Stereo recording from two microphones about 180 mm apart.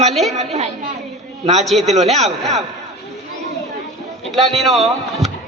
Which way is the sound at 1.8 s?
35° right (ahead or behind).